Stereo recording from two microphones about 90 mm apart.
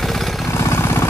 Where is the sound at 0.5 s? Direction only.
30° left (ahead or behind).